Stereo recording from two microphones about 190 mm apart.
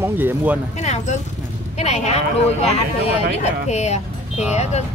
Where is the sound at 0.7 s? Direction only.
40° left (ahead or behind).